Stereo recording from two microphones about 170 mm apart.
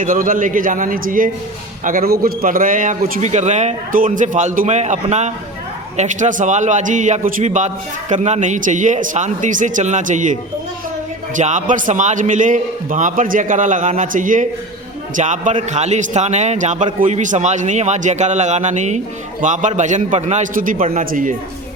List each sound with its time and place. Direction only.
0.0 s a man's voice: 55° right (ahead or behind)
11.3 s a man's voice: 50° right (ahead or behind)